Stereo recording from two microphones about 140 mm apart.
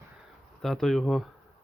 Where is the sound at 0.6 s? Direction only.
Centre (ahead or behind).